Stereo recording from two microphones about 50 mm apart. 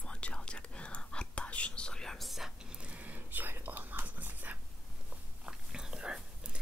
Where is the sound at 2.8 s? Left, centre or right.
Right.